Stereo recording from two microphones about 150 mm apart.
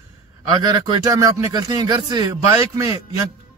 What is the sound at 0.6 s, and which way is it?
Speech, 25° right (ahead or behind).